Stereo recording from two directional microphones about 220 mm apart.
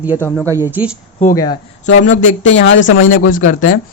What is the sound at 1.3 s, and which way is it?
Speech, 15° left (ahead or behind).